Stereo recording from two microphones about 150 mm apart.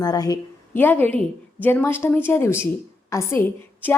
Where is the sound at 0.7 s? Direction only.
10° left (ahead or behind).